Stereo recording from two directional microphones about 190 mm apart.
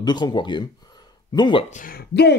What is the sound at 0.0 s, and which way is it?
Speech, 20° left (ahead or behind).